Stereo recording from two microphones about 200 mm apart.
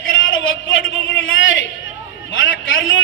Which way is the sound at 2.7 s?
75° left (ahead or behind).